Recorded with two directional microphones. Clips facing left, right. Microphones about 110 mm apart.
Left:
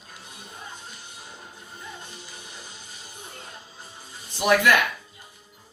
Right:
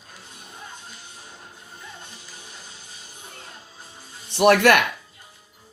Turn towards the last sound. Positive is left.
turn(degrees=-65)  # may be behind; listen again after turning